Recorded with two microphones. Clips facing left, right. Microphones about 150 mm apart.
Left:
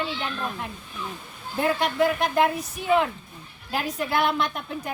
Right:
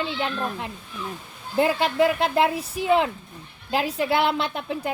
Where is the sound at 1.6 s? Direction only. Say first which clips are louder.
Right 3 dB; 25° right (ahead or behind).